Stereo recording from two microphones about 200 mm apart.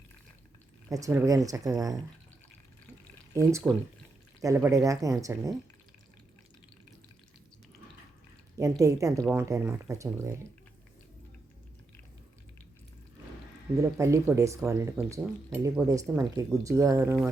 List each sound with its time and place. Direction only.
0.9 s speech: 15° right (ahead or behind)
3.3 s speech: 15° right (ahead or behind)
8.8 s speech: 15° right (ahead or behind)
13.7 s speech: 15° right (ahead or behind)